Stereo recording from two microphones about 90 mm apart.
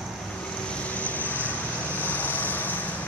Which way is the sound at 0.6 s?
15° left (ahead or behind).